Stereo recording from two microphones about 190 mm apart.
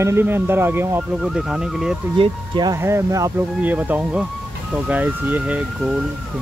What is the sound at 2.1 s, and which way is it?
Speech, 25° right (ahead or behind).